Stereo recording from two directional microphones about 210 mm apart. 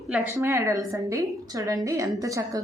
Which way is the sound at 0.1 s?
15° right (ahead or behind).